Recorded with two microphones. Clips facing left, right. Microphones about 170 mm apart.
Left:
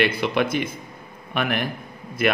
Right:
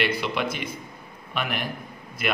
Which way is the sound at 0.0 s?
55° left (ahead or behind).